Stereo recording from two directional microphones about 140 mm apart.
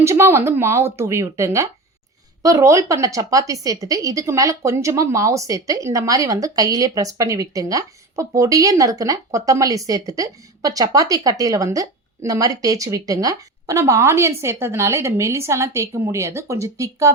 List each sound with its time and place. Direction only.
0.0 s speech: 20° right (ahead or behind)